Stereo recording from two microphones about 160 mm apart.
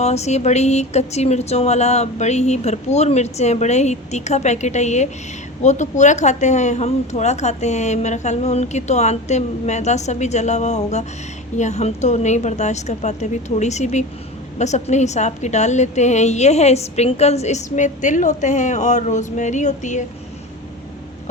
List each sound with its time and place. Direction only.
0.0 s a woman's voice: 45° left (ahead or behind)